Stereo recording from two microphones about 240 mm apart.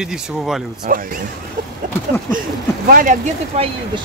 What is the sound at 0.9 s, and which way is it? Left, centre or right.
Speech, right.